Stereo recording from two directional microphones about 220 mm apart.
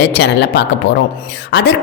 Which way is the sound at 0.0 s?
50° left (ahead or behind).